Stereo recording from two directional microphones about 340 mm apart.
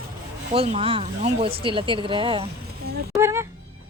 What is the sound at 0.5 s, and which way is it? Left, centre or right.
Speech, centre.